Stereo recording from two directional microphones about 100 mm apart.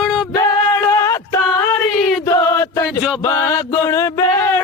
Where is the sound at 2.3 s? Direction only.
30° left (ahead or behind).